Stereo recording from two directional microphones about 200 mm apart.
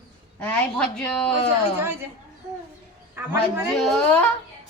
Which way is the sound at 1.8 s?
10° right (ahead or behind).